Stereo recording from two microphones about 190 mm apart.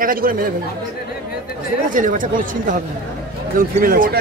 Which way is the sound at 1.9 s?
45° right (ahead or behind).